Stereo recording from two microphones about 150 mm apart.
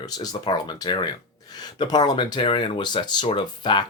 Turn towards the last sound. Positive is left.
turn(degrees=30)  # may be behind; listen again after turning